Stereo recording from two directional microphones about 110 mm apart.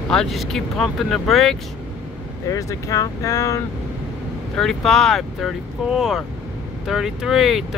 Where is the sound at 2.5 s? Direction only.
30° left (ahead or behind).